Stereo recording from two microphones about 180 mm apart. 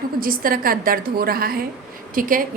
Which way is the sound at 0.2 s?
50° right (ahead or behind).